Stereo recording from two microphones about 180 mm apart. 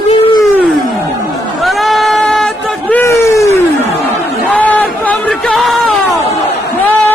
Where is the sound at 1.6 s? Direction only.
Centre (ahead or behind).